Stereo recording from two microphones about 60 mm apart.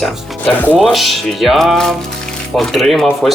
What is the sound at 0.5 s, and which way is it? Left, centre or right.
Speech, left.